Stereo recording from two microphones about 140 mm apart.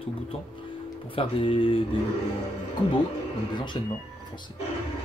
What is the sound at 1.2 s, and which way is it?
Speech, 40° left (ahead or behind).